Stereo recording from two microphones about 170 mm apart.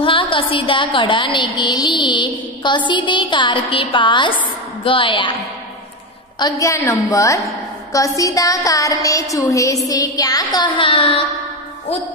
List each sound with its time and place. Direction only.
0.0 s a woman's voice: 30° left (ahead or behind)
6.4 s a woman's voice: 20° left (ahead or behind)